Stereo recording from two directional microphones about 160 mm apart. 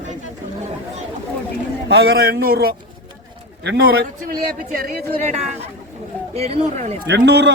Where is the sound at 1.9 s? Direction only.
90° right; by 2.7 s 70° right (ahead or behind).